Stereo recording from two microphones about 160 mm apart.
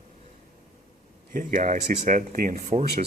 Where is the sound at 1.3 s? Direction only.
55° right (ahead or behind).